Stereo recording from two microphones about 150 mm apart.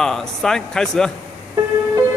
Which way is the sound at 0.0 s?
5° left (ahead or behind).